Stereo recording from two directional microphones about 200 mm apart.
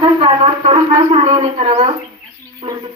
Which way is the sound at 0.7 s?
35° right (ahead or behind).